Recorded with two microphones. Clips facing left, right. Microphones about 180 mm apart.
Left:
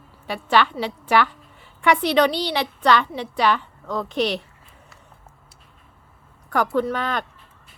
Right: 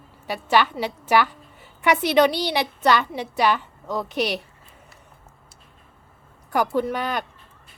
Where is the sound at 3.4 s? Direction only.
10° right (ahead or behind).